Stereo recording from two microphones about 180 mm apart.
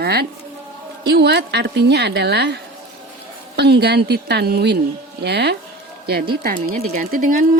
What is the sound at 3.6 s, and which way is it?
A woman's voice, 65° right (ahead or behind).